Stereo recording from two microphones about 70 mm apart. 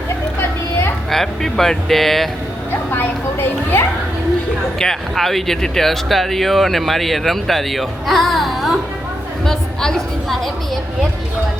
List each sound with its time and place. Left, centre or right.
0.3 s a sound: left
1.1 s speech: centre
2.9 s speech: left
4.8 s a woman's voice: centre